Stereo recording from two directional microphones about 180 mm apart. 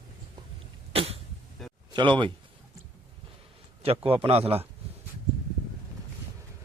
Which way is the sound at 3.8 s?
35° right (ahead or behind).